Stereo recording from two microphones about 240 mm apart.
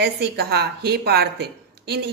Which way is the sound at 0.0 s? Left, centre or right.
Right.